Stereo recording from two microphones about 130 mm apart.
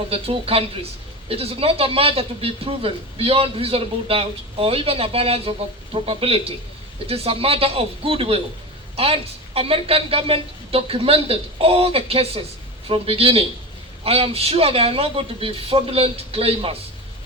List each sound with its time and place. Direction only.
0.1 s speech: 50° right (ahead or behind)